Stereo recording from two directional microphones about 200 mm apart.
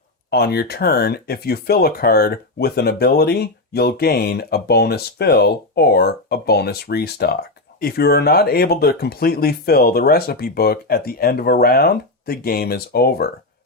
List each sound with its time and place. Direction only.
0.3 s speech: 55° left (ahead or behind)